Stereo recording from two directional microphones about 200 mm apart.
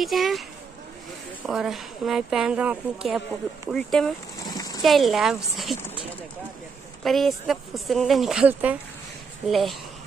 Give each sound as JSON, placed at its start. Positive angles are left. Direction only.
{"t": 0.0, "sound": "speech", "side_deg": 0}
{"t": 1.5, "sound": "speech", "side_deg": 0}
{"t": 4.4, "sound": "a sound", "side_deg": 20}
{"t": 4.8, "sound": "speech", "side_deg": 0}
{"t": 7.0, "sound": "speech", "side_deg": 0}